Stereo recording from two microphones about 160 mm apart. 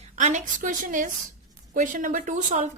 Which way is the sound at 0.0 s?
45° right (ahead or behind).